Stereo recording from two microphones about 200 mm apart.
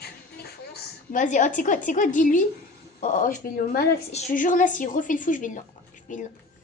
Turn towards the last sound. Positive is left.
turn(degrees=40)  # may be behind; listen again after turning